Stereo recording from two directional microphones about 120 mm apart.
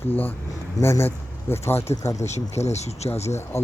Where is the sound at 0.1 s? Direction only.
15° left (ahead or behind).